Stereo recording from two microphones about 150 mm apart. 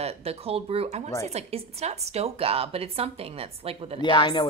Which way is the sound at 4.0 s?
30° left (ahead or behind).